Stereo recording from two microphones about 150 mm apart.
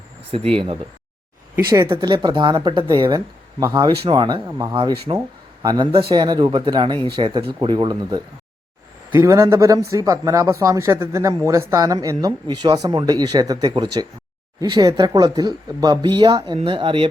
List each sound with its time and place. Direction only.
0.5 s speech: 35° right (ahead or behind)
1.9 s a man's voice: 30° right (ahead or behind)
4.7 s a man's voice: 30° right (ahead or behind)
9.1 s a man's voice: 20° right (ahead or behind); by 17.1 s 35° right (ahead or behind)